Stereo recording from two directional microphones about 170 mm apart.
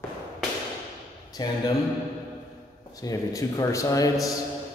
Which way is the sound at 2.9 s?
20° left (ahead or behind).